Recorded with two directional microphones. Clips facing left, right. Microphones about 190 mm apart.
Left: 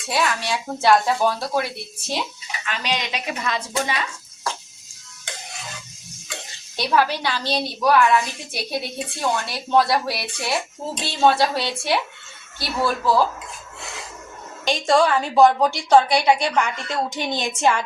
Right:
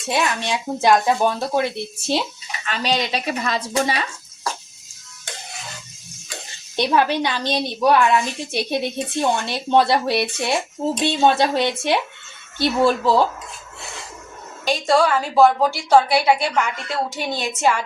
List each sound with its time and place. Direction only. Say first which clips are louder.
0.0 s a woman's voice: right 1 dB; 20° right (ahead or behind)
2.6 s a woman's voice: right 4 dB; 35° right (ahead or behind)
6.7 s a woman's voice: right 2 dB; 20° right (ahead or behind)
14.7 s a woman's voice: even; 5° right (ahead or behind)